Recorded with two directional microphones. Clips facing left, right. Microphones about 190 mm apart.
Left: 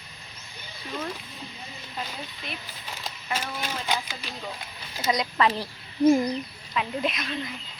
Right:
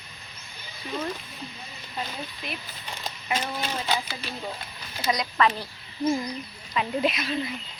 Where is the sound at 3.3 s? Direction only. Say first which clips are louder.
Right 2 dB; 10° left (ahead or behind).